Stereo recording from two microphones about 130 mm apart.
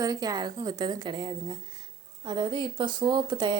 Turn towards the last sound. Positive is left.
turn(degrees=-35)  # may be behind; listen again after turning